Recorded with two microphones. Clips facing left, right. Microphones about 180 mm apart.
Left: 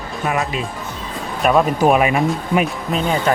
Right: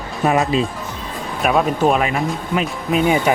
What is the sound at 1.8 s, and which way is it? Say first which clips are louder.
Speech: left 2 dB; 10° left (ahead or behind).